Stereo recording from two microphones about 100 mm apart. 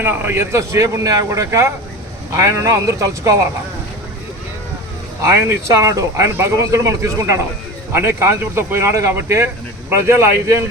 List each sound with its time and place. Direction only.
0.0 s speech: 20° right (ahead or behind)
5.2 s speech: 25° right (ahead or behind)